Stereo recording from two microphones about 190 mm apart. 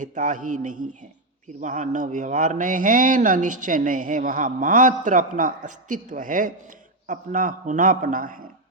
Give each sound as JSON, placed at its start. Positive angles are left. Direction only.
{"t": 0.0, "sound": "a man's voice", "side_deg": -40}